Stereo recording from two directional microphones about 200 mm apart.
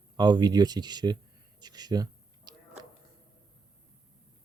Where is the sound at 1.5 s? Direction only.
20° right (ahead or behind).